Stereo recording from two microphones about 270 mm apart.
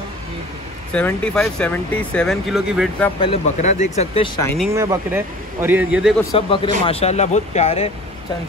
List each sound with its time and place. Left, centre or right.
0.9 s speech: centre
3.2 s speech: left
4.4 s speech: centre
4.7 s a man's voice: centre
6.3 s speech: centre